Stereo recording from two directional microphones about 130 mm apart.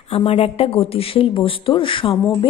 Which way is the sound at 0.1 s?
50° left (ahead or behind).